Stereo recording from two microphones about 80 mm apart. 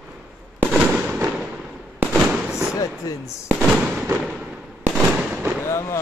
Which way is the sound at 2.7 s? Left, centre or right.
Left.